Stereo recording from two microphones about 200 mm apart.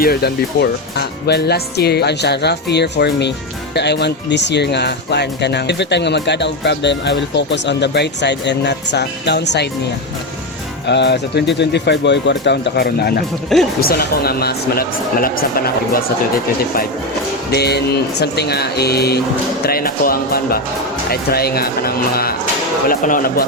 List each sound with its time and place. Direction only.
0.0 s speech: 50° left (ahead or behind)
10.8 s speech: 60° left (ahead or behind)
13.5 s speech: centre (ahead or behind)
13.8 s speech: 50° left (ahead or behind)
17.5 s speech: 55° left (ahead or behind)